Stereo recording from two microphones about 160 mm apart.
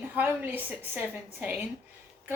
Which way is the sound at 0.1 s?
10° right (ahead or behind).